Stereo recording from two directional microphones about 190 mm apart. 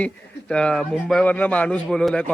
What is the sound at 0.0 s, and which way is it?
A man's voice, 5° left (ahead or behind).